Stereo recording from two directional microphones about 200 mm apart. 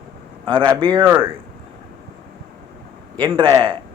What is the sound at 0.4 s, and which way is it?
Speech, 25° right (ahead or behind).